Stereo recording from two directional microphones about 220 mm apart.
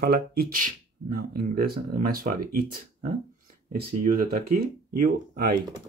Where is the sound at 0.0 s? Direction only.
45° right (ahead or behind).